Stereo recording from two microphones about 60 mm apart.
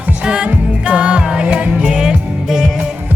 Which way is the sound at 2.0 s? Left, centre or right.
Centre.